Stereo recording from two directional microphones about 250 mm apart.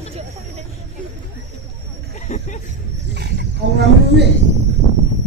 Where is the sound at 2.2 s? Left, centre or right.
Left.